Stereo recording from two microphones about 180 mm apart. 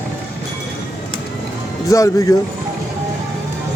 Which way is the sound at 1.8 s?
20° left (ahead or behind).